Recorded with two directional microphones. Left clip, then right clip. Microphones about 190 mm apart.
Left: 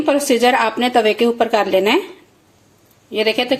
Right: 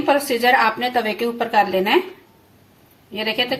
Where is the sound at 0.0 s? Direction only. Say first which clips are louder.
Left 3 dB; 50° left (ahead or behind).